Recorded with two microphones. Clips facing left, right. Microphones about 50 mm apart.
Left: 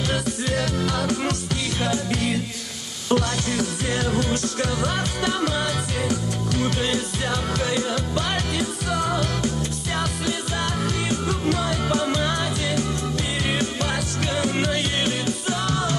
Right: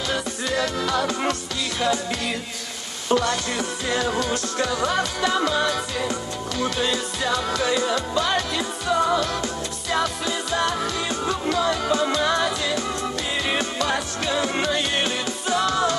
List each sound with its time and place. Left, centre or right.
0.5 s music: right
13.8 s music: right